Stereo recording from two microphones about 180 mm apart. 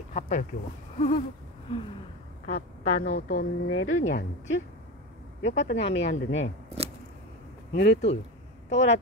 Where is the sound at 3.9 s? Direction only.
90° left.